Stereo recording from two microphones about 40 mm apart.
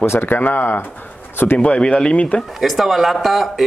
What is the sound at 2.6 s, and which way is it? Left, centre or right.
Speech, centre.